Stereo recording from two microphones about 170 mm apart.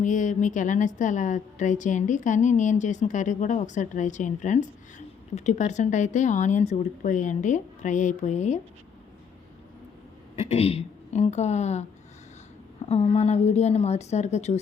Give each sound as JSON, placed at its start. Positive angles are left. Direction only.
{"t": 0.0, "sound": "a woman's voice", "side_deg": 45}
{"t": 10.5, "sound": "a woman's voice", "side_deg": 35}